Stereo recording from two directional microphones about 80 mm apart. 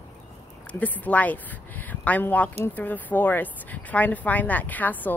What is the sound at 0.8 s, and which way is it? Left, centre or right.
Speech, centre.